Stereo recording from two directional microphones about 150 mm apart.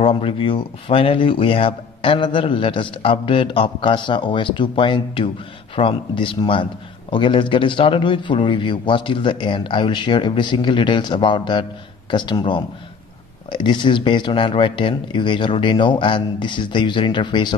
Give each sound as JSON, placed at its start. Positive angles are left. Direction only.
{"t": 0.0, "sound": "a man's voice", "side_deg": 35}